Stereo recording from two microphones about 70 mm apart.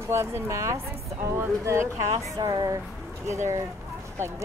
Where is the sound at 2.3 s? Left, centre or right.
Right.